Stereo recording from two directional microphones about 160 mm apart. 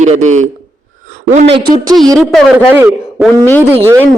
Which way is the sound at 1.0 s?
50° right (ahead or behind).